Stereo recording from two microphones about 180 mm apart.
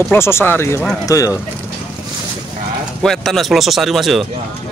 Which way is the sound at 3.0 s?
Centre (ahead or behind).